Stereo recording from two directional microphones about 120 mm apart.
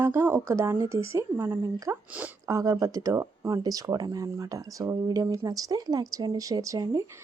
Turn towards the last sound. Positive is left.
turn(degrees=-30)  # may be behind; listen again after turning